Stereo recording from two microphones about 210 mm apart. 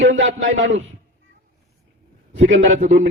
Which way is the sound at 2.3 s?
60° right (ahead or behind).